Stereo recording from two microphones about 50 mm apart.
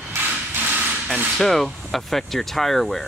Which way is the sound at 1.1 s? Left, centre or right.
Centre.